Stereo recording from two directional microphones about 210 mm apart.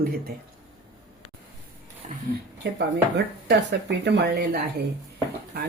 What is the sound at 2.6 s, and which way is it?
Speech, 55° right (ahead or behind).